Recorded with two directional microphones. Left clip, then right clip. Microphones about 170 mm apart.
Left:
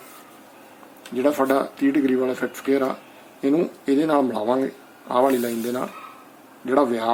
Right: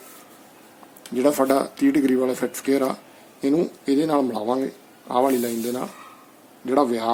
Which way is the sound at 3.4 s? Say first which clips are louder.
Even; 15° right (ahead or behind).